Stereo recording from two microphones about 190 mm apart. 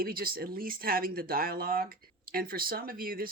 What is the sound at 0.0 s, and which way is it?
Speech, 50° right (ahead or behind).